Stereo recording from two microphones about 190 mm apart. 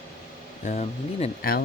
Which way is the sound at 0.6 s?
35° left (ahead or behind).